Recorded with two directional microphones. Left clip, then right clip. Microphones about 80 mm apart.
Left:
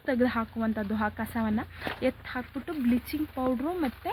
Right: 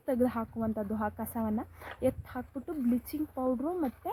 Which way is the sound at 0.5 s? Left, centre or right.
Centre.